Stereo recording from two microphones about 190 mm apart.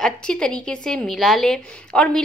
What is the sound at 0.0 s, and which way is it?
A woman's voice, 5° left (ahead or behind).